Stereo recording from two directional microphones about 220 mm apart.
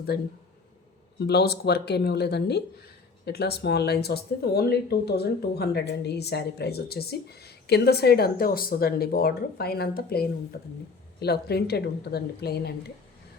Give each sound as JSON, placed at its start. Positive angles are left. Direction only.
{"t": 0.1, "sound": "speech", "side_deg": 45}
{"t": 1.3, "sound": "speech", "side_deg": 45}